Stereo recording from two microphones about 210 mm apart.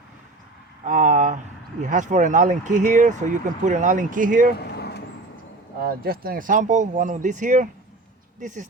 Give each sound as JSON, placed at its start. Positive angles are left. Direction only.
{"t": 0.9, "sound": "a sound", "side_deg": -35}
{"t": 1.8, "sound": "speech", "side_deg": -35}
{"t": 4.5, "sound": "vehicle", "side_deg": 50}
{"t": 5.8, "sound": "speech", "side_deg": -45}